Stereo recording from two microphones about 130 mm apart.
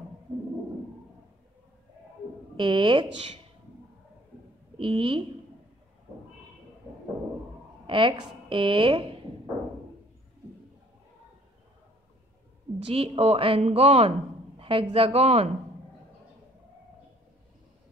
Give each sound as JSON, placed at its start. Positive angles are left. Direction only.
{"t": 2.5, "sound": "speech", "side_deg": -40}
{"t": 4.7, "sound": "a woman's voice", "side_deg": -40}
{"t": 6.8, "sound": "a sound", "side_deg": -15}
{"t": 7.8, "sound": "a woman's voice", "side_deg": -40}
{"t": 12.7, "sound": "speech", "side_deg": -45}